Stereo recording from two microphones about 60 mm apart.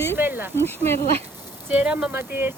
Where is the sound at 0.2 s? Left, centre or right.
Right.